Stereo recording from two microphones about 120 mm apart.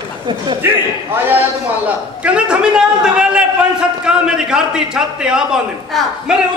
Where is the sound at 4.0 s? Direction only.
5° right (ahead or behind).